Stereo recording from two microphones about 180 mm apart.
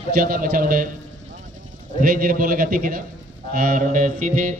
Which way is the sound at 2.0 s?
50° right (ahead or behind).